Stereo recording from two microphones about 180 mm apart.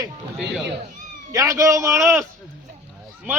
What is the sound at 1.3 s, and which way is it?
Speech, 20° right (ahead or behind).